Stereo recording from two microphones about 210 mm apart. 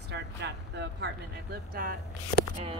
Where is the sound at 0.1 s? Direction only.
55° right (ahead or behind).